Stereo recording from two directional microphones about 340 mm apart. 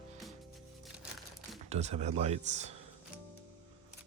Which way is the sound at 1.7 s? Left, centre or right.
Centre.